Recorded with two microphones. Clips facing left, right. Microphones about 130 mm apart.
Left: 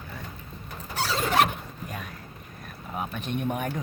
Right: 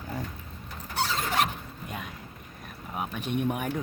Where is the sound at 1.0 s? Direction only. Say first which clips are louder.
Left 4 dB; 80° left.